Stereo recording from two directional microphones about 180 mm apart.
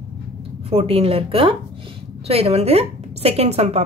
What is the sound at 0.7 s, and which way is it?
A woman's voice, 35° right (ahead or behind).